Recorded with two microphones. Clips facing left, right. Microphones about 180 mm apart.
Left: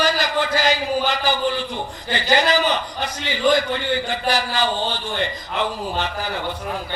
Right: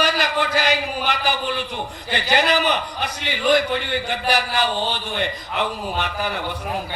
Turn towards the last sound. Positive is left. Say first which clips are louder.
# even
turn(degrees=-65)  # may be behind; listen again after turning